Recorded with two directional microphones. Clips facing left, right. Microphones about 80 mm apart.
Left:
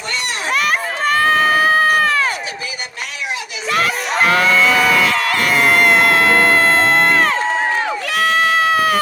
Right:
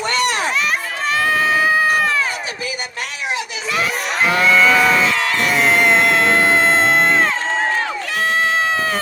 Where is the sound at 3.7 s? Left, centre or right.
Left.